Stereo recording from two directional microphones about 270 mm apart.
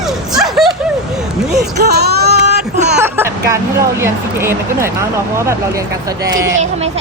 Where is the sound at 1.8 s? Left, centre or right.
Right.